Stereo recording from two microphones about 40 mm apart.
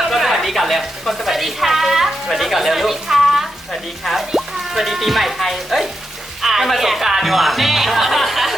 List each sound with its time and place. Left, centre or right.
0.0 s speech: centre
6.4 s music: centre
6.7 s speech: centre